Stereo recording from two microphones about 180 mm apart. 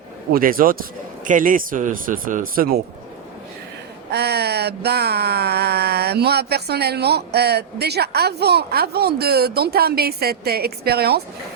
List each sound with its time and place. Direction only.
0.3 s a man's voice: 50° right (ahead or behind)
4.1 s speech: 65° right (ahead or behind)